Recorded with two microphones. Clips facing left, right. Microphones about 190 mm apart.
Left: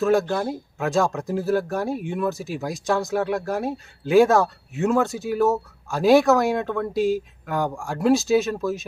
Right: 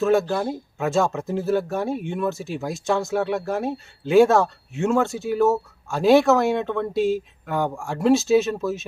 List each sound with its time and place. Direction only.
0.0 s speech: centre (ahead or behind)